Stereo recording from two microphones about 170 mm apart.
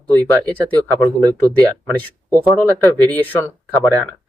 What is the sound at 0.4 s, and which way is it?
Speech, 5° left (ahead or behind).